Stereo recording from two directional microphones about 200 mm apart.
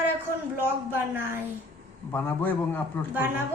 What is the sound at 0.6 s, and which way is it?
Speech, 10° right (ahead or behind).